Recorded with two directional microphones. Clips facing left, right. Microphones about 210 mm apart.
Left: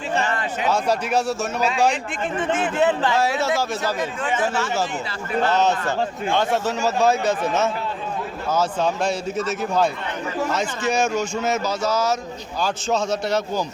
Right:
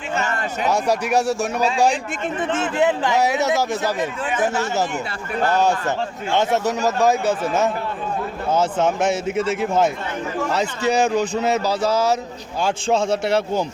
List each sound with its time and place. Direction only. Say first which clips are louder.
0.7 s a man's voice: right 2 dB; 15° right (ahead or behind)
2.7 s a man's voice: right 2 dB; 15° right (ahead or behind)
5.5 s a man's voice: right 3 dB; 10° right (ahead or behind)
8.4 s a man's voice: right 2 dB; 25° right (ahead or behind)
10.5 s a man's voice: right 5 dB; 35° right (ahead or behind)